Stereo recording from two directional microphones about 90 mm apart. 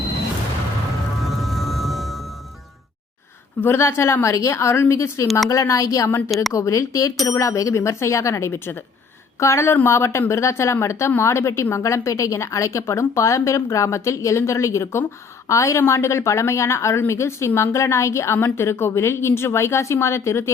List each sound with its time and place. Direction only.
1.2 s music: centre (ahead or behind)
3.6 s a woman's voice: 25° left (ahead or behind)
6.1 s a woman's voice: 25° left (ahead or behind)